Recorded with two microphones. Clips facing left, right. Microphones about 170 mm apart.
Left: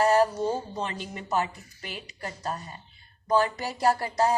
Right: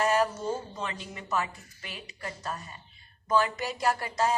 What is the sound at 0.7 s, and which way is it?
Speech, 35° left (ahead or behind).